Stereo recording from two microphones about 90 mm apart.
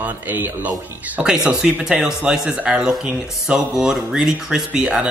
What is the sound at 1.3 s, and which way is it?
Speech, 5° right (ahead or behind).